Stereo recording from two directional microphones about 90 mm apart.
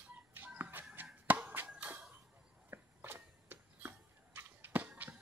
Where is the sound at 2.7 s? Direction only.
25° right (ahead or behind).